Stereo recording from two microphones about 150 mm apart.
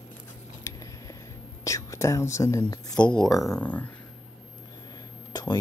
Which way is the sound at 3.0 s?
5° left (ahead or behind).